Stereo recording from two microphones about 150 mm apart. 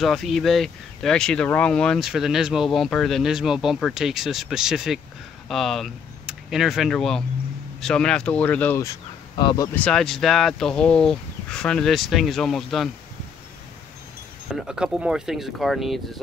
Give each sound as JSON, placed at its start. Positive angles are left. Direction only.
{"t": 0.0, "sound": "speech", "side_deg": 0}
{"t": 9.4, "sound": "speech", "side_deg": 30}
{"t": 9.8, "sound": "speech", "side_deg": 5}
{"t": 14.5, "sound": "speech", "side_deg": -5}